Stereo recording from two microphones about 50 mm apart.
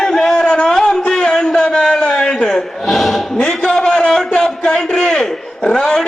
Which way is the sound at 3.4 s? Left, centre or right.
Centre.